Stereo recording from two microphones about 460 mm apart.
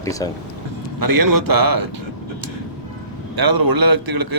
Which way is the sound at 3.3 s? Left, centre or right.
Right.